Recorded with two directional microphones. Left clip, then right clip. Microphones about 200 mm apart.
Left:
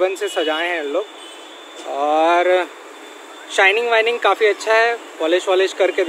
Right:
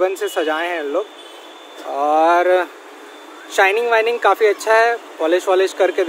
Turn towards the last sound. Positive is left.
turn(degrees=-5)  # may be behind; listen again after turning